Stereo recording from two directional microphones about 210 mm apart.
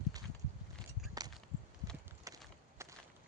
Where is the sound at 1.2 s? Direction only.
15° right (ahead or behind).